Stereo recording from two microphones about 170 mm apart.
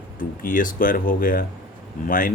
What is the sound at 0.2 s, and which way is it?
Speech, 55° left (ahead or behind).